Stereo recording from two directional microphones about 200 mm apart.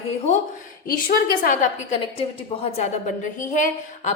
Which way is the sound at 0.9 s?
45° left (ahead or behind).